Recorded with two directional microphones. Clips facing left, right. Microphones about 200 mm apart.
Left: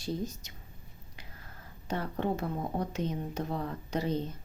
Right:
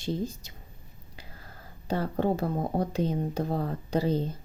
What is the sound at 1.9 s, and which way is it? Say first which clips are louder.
Speech: right 5 dB; 35° right (ahead or behind).